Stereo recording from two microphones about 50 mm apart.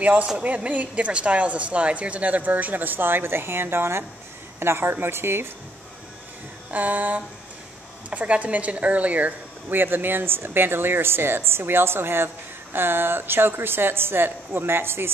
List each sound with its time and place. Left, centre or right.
0.0 s a woman's voice: right
6.7 s a woman's voice: right